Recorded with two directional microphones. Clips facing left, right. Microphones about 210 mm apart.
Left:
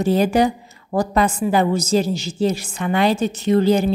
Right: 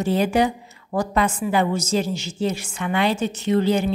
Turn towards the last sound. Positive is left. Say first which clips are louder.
# left 4 dB
turn(degrees=40)  # may be behind; listen again after turning